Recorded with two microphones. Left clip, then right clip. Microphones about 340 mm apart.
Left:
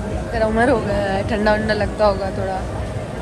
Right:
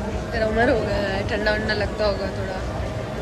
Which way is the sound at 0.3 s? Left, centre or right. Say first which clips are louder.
Left 3 dB; centre.